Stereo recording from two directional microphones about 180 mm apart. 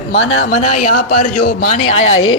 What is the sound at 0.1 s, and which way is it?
Speech, 80° left.